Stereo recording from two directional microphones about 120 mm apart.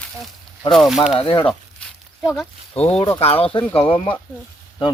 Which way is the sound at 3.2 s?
55° left (ahead or behind).